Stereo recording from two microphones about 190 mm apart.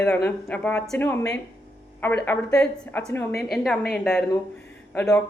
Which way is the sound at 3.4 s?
Centre (ahead or behind).